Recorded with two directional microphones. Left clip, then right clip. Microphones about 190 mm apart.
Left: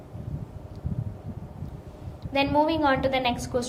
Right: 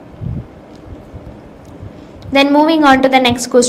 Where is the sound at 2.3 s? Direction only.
50° right (ahead or behind).